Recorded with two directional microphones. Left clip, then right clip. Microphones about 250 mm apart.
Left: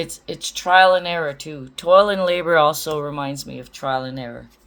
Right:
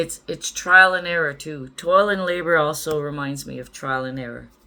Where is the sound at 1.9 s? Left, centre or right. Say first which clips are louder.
Left 4 dB; left.